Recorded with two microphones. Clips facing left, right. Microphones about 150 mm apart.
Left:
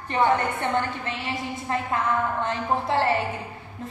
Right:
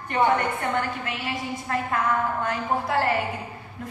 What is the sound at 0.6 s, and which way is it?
A woman's voice, 25° left (ahead or behind).